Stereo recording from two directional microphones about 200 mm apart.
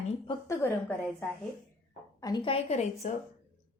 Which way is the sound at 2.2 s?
20° left (ahead or behind).